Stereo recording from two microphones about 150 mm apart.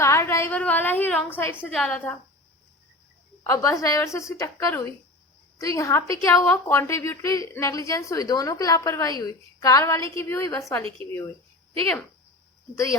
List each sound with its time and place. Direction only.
0.0 s a woman's voice: 20° left (ahead or behind)
3.4 s speech: 20° left (ahead or behind)
12.7 s speech: 20° left (ahead or behind)